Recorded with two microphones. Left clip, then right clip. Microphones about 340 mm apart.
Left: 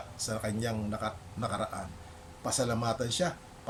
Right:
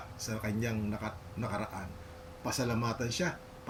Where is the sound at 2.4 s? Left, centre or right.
Left.